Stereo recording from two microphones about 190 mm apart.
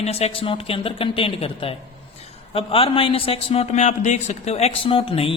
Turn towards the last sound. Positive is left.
turn(degrees=30)  # may be behind; listen again after turning